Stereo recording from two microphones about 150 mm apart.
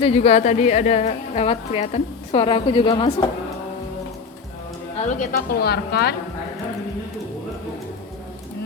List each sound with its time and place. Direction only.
0.0 s a woman's voice: 45° left (ahead or behind)
4.9 s speech: 55° left (ahead or behind)
5.5 s a woman's voice: 90° left